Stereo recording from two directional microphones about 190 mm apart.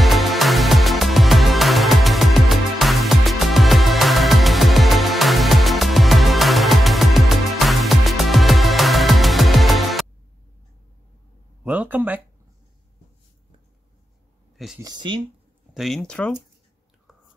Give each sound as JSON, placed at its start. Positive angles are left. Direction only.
{"t": 0.0, "sound": "music", "side_deg": 0}
{"t": 11.6, "sound": "a sound", "side_deg": -5}
{"t": 14.8, "sound": "speech", "side_deg": -20}
{"t": 15.7, "sound": "speech", "side_deg": 0}